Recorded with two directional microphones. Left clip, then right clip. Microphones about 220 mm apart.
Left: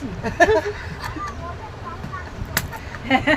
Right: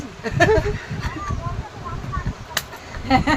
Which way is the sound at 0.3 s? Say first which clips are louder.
Left 1 dB; 15° right (ahead or behind).